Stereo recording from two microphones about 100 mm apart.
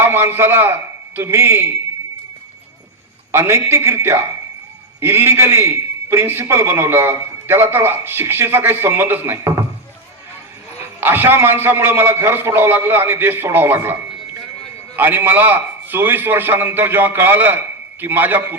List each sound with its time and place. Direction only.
0.0 s a man's voice: 25° right (ahead or behind)
3.3 s a man's voice: 30° right (ahead or behind)
11.0 s a man's voice: 20° right (ahead or behind)